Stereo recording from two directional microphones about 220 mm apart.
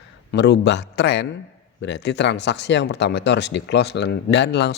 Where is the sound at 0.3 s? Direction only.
50° left (ahead or behind).